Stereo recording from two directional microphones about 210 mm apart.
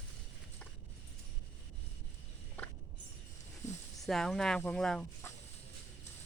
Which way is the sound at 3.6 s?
35° left (ahead or behind).